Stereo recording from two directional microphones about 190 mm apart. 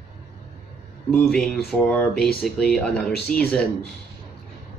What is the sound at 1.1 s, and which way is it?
Speech, 5° left (ahead or behind).